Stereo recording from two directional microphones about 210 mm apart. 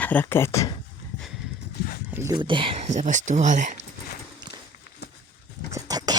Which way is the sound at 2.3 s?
25° right (ahead or behind).